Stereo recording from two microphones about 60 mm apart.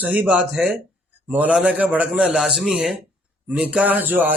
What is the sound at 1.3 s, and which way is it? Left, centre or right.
Speech, right.